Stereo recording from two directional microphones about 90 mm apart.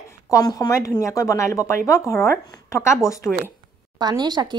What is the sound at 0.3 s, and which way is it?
Speech, 40° left (ahead or behind).